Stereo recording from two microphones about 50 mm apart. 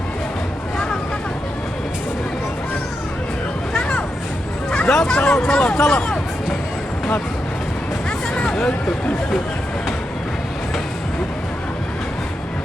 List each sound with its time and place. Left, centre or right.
3.8 s vehicle: left
4.9 s speech: centre
8.4 s music: centre